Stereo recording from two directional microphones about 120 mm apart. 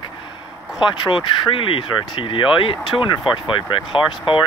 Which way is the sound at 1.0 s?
40° left (ahead or behind).